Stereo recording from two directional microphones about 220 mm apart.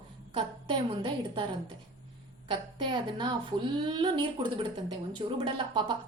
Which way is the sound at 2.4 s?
20° right (ahead or behind).